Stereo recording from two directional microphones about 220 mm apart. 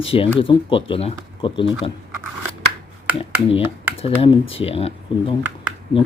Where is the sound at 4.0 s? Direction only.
25° left (ahead or behind).